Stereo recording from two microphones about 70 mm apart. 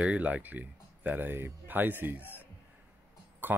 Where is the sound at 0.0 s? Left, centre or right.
Centre.